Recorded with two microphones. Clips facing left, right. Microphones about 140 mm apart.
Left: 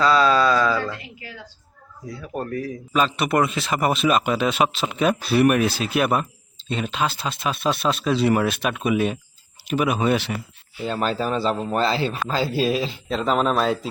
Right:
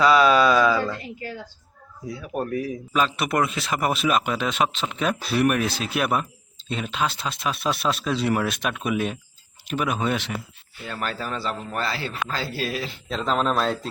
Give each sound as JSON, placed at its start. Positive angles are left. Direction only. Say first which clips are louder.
{"t": 0.0, "sound": "a sound", "louder": "right 1 dB", "side_deg": -15}
{"t": 2.2, "sound": "speech", "louder": "right 1 dB", "side_deg": -10}
{"t": 2.9, "sound": "speech", "louder": "left 3 dB", "side_deg": 0}
{"t": 10.8, "sound": "speech", "louder": "left 7 dB", "side_deg": 25}
{"t": 13.1, "sound": "speech", "louder": "left 2 dB", "side_deg": 5}